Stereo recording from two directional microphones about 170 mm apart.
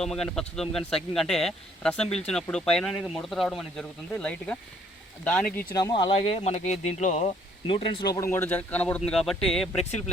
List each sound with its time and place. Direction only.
0.0 s speech: 5° left (ahead or behind)
5.7 s speech: 25° left (ahead or behind); by 9.8 s 5° left (ahead or behind)